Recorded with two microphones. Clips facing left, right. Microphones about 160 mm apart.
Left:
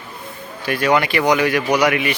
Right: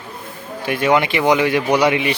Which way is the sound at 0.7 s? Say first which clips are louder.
Right 1 dB; 20° right (ahead or behind).